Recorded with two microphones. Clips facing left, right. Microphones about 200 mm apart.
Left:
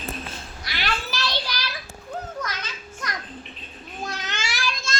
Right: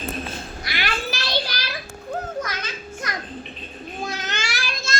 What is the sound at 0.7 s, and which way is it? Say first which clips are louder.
Children playing: right 1 dB; 10° right (ahead or behind).